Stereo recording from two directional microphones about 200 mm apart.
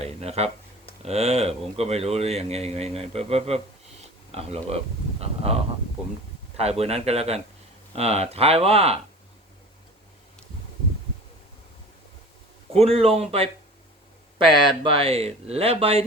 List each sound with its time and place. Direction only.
0.0 s speech: 30° right (ahead or behind)
5.2 s a sound: 30° right (ahead or behind)
6.6 s speech: 30° right (ahead or behind)
12.7 s speech: 30° right (ahead or behind)
14.8 s speech: 30° right (ahead or behind)